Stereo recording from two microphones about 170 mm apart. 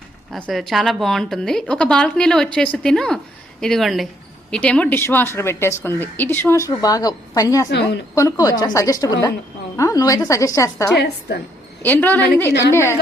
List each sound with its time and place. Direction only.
0.3 s a woman's voice: 5° left (ahead or behind); by 7.7 s 20° left (ahead or behind)
7.7 s a woman's voice: 80° left
8.1 s a woman's voice: 20° left (ahead or behind)
10.9 s a woman's voice: 75° left (ahead or behind)
11.8 s speech: 10° left (ahead or behind)
12.5 s a woman's voice: 80° left
12.7 s speech: 15° left (ahead or behind)